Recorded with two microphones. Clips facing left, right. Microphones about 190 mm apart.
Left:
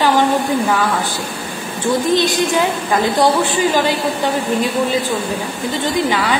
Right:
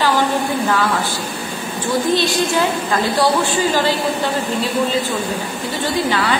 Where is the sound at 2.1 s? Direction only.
20° left (ahead or behind).